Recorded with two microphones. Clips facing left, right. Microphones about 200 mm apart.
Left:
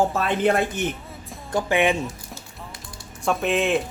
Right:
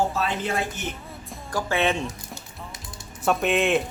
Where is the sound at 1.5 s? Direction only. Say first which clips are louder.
Left 3 dB; 20° left (ahead or behind).